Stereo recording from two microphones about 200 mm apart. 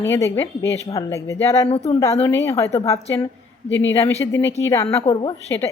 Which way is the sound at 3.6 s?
65° left (ahead or behind).